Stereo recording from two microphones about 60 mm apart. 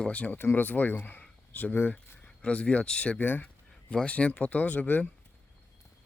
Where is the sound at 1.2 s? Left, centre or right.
Left.